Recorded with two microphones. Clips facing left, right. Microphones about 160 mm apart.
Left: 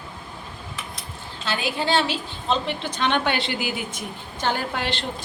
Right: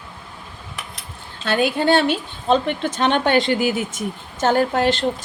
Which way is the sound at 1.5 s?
55° right (ahead or behind).